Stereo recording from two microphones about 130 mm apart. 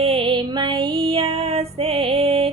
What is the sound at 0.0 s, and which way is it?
Female singing, 45° right (ahead or behind).